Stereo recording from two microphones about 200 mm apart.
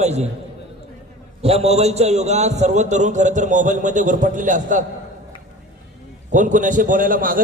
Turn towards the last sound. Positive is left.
turn(degrees=-45)  # may be behind; listen again after turning